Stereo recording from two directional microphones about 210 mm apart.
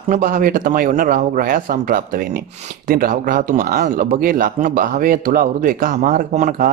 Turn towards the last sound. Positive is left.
turn(degrees=-35)  # may be behind; listen again after turning